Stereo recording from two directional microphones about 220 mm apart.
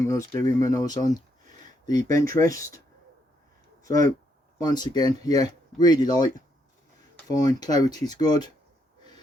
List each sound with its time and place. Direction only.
0.0 s speech: 15° left (ahead or behind)
3.8 s speech: 15° left (ahead or behind)
7.3 s speech: 15° left (ahead or behind)